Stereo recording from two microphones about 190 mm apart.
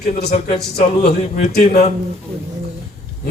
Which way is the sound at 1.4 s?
35° left (ahead or behind).